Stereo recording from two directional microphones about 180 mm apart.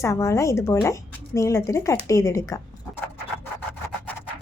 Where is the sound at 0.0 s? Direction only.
15° left (ahead or behind).